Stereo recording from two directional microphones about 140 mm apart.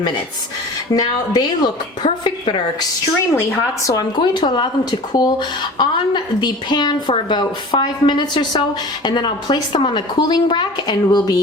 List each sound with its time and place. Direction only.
0.9 s speech: 30° left (ahead or behind)
3.3 s speech: 20° left (ahead or behind)